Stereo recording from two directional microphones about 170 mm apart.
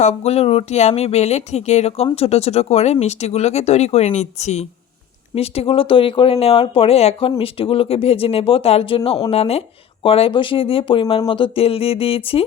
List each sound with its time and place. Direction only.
0.0 s speech: 40° left (ahead or behind)